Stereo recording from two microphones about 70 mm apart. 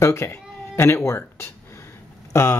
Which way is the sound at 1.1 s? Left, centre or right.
Left.